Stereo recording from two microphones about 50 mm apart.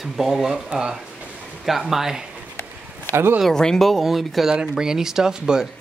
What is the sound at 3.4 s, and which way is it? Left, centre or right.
Speech, centre.